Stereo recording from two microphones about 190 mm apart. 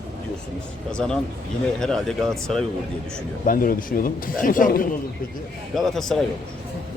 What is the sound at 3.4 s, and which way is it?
Speech, 50° left (ahead or behind).